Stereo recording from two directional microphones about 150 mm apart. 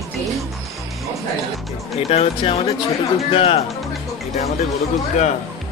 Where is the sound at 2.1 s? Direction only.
40° left (ahead or behind).